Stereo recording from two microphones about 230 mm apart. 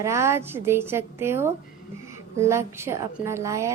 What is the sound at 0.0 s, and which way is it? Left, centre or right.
A woman's voice, centre.